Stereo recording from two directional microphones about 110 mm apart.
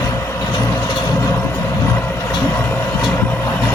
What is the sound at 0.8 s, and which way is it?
Vehicle, 40° left (ahead or behind).